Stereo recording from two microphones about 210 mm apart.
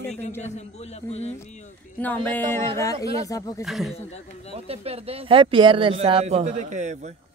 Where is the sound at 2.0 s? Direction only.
10° left (ahead or behind).